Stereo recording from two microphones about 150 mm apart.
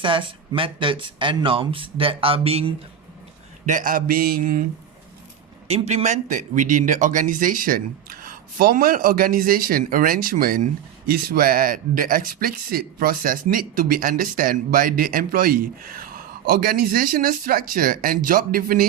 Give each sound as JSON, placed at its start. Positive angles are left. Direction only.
{"t": 0.0, "sound": "speech", "side_deg": -35}
{"t": 3.7, "sound": "speech", "side_deg": -65}
{"t": 5.6, "sound": "speech", "side_deg": -45}
{"t": 16.5, "sound": "speech", "side_deg": -90}